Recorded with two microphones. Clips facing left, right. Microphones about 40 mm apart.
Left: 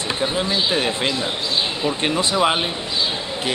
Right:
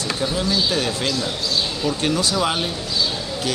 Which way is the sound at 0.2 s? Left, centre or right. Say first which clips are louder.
Even; left.